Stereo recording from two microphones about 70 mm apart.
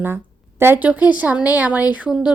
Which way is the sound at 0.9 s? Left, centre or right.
Right.